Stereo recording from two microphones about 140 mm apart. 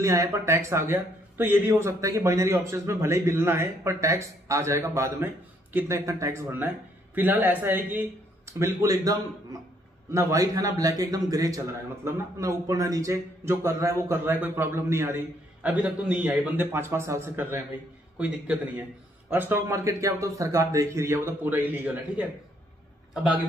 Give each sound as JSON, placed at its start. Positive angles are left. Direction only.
{"t": 0.0, "sound": "a man's voice", "side_deg": -20}
{"t": 8.8, "sound": "a man's voice", "side_deg": -25}